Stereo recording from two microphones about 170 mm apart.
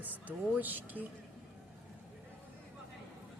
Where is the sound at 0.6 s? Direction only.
10° right (ahead or behind).